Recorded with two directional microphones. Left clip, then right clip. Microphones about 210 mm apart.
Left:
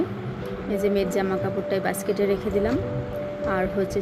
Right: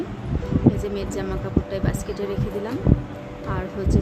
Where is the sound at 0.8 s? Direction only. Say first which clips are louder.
Left 5 dB; 20° left (ahead or behind).